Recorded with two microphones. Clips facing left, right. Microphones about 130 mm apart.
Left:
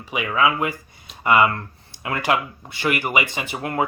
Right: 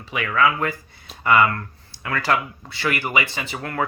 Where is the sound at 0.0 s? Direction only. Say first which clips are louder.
Even; 15° left (ahead or behind).